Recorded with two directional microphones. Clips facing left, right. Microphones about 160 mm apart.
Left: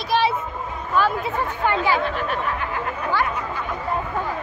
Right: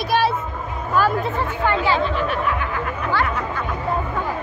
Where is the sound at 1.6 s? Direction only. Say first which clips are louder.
Right 1 dB; 15° left (ahead or behind).